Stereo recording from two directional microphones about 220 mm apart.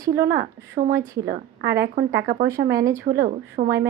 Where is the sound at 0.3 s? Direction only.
40° right (ahead or behind).